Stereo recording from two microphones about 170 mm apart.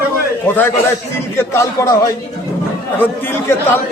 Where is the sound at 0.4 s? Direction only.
10° left (ahead or behind).